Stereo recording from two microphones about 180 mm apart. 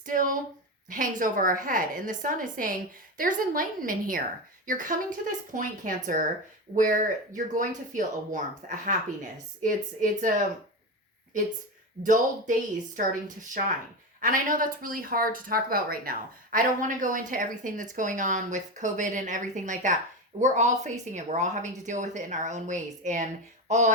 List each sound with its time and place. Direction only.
0.0 s a sound: 50° right (ahead or behind)
0.9 s speech: 50° right (ahead or behind)
12.0 s a woman's voice: 45° right (ahead or behind)